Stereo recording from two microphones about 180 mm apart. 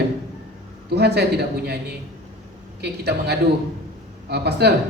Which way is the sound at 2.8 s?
65° right (ahead or behind).